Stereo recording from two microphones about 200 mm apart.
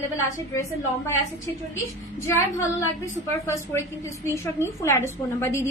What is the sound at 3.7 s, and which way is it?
A woman's voice, 15° left (ahead or behind).